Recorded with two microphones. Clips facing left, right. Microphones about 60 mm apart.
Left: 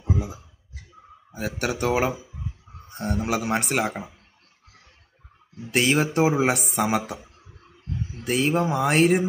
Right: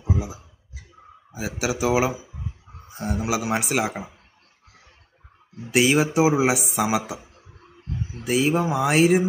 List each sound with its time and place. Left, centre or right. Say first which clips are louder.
0.0 s a sound: right 1 dB; centre
1.3 s speech: right 1 dB; centre
5.7 s speech: right 2 dB; centre